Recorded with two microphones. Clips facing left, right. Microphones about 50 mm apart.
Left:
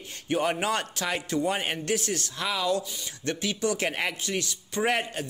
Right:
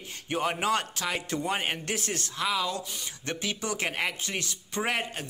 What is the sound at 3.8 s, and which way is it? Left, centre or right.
Speech, centre.